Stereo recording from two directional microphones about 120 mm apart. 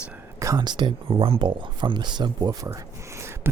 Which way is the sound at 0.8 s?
45° right (ahead or behind).